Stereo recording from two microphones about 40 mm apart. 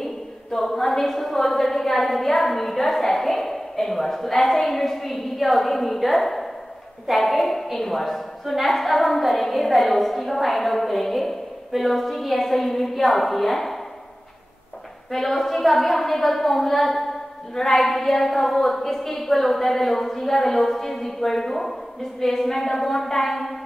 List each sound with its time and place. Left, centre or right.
0.0 s a woman's voice: centre
15.0 s a woman's voice: centre